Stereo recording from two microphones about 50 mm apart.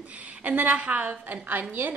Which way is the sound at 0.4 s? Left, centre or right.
Right.